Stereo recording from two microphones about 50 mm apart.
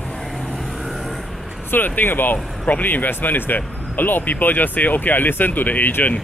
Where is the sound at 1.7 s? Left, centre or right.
Left.